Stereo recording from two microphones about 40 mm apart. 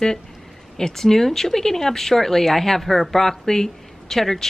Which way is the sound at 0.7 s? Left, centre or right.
Centre.